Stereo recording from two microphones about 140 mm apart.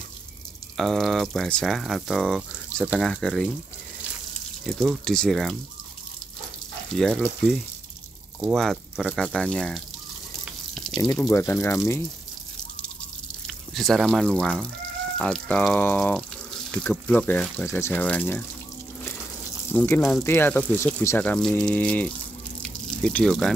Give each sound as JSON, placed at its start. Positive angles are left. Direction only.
{"t": 0.7, "sound": "speech", "side_deg": 0}
{"t": 4.6, "sound": "speech", "side_deg": 0}
{"t": 7.0, "sound": "speech", "side_deg": 5}
{"t": 8.5, "sound": "speech", "side_deg": 0}
{"t": 10.4, "sound": "water", "side_deg": 0}
{"t": 11.2, "sound": "speech", "side_deg": 20}
{"t": 13.5, "sound": "speech", "side_deg": 0}
{"t": 17.6, "sound": "speech", "side_deg": 20}
{"t": 19.7, "sound": "speech", "side_deg": 15}
{"t": 21.2, "sound": "speech", "side_deg": 5}
{"t": 22.6, "sound": "water", "side_deg": 5}